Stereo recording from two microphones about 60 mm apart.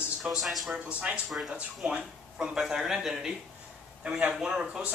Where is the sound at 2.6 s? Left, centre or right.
Centre.